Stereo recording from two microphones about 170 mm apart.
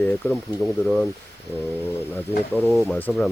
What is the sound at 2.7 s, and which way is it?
Speech, centre (ahead or behind).